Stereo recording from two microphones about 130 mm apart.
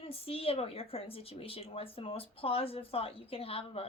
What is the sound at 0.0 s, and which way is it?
Speech, 45° left (ahead or behind).